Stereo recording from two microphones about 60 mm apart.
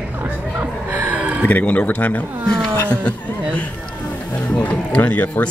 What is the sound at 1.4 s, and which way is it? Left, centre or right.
Speech, left.